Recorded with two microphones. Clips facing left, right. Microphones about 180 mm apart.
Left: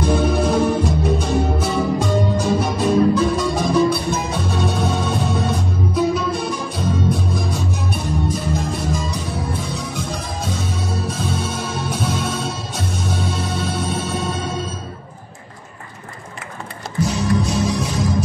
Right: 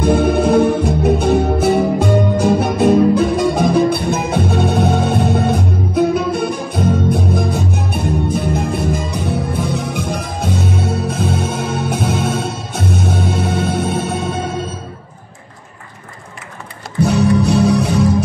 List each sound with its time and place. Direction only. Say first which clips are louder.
0.0 s music: right 4 dB; 55° right (ahead or behind)
17.0 s music: right 6 dB; 60° right (ahead or behind)